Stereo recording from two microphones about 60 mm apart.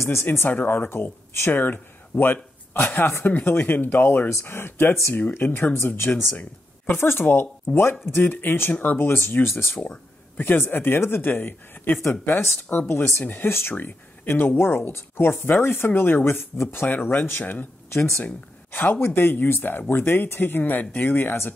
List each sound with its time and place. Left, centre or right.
0.0 s speech: left
7.7 s speech: left
8.0 s speech: left
8.3 s speech: left